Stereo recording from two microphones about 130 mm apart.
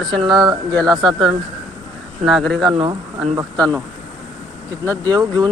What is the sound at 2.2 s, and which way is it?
Speech, centre (ahead or behind).